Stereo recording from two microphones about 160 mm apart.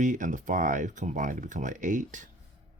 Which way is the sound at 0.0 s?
50° right (ahead or behind).